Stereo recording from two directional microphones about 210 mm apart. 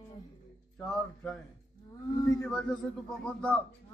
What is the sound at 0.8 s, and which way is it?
Speech, 5° left (ahead or behind).